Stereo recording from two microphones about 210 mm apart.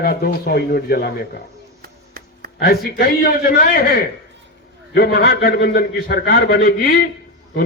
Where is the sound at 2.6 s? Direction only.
45° left (ahead or behind).